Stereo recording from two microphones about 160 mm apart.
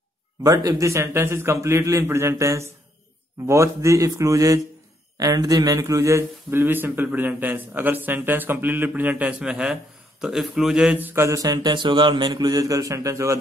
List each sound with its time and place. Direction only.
0.4 s a man's voice: 20° right (ahead or behind)